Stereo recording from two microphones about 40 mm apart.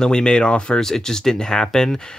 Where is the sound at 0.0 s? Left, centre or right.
Left.